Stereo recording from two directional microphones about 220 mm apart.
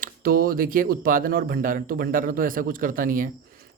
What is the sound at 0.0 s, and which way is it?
Speech, 40° right (ahead or behind).